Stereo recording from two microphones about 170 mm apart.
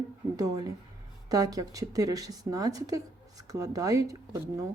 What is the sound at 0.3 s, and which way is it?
A woman's voice, 20° right (ahead or behind).